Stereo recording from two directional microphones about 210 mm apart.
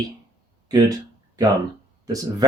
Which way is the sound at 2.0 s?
15° right (ahead or behind).